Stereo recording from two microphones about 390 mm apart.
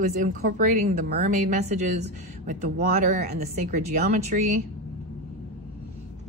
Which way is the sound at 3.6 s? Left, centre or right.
Centre.